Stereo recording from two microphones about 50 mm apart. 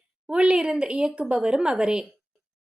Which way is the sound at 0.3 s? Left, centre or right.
Right.